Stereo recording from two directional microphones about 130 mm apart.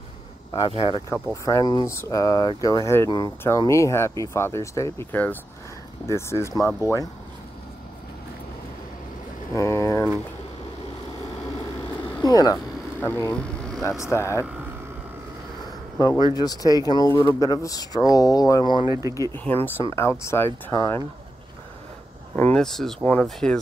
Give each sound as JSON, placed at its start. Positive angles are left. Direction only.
{"t": 0.7, "sound": "speech", "side_deg": 45}
{"t": 1.1, "sound": "speech", "side_deg": 25}
{"t": 6.8, "sound": "speech", "side_deg": -20}
{"t": 9.5, "sound": "a sound", "side_deg": 20}
{"t": 12.2, "sound": "vehicle", "side_deg": 30}
{"t": 13.0, "sound": "speech", "side_deg": 15}
{"t": 16.0, "sound": "speech", "side_deg": 25}
{"t": 18.9, "sound": "speech", "side_deg": -25}
{"t": 19.3, "sound": "speech", "side_deg": 15}
{"t": 22.3, "sound": "speech", "side_deg": 10}